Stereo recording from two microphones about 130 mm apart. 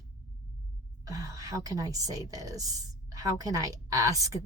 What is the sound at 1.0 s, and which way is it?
A woman's voice, 25° right (ahead or behind).